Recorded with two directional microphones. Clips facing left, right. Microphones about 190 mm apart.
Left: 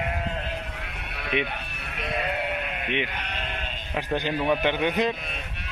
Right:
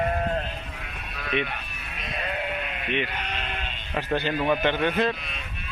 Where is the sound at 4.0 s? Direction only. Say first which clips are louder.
Right 1 dB; 15° left (ahead or behind).